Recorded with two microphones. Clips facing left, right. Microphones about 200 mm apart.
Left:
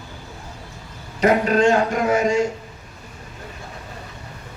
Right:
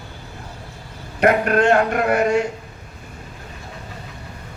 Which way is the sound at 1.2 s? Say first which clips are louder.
Even; 60° right (ahead or behind).